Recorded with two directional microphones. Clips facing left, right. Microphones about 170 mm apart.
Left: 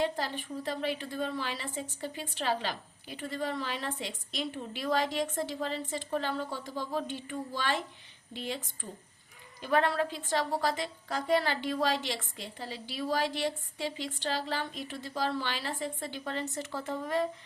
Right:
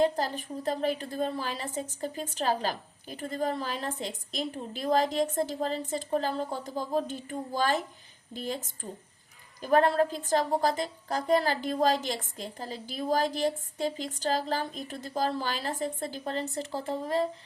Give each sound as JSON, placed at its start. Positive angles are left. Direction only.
{"t": 0.0, "sound": "a woman's voice", "side_deg": -40}